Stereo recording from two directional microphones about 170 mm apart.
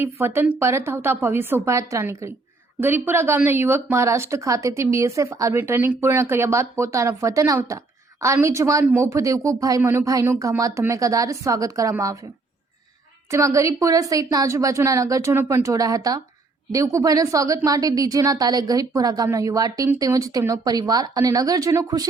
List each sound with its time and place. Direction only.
0.0 s speech: 15° right (ahead or behind)
13.3 s speech: 20° right (ahead or behind)